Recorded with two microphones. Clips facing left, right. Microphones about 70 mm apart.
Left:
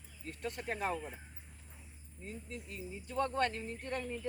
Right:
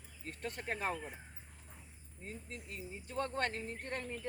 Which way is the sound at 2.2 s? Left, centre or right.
Right.